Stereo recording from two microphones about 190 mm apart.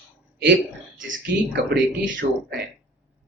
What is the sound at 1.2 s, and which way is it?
Speech, 65° right (ahead or behind).